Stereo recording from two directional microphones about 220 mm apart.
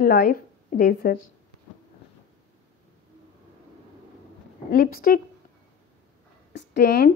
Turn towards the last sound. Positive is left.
turn(degrees=45)  # may be behind; listen again after turning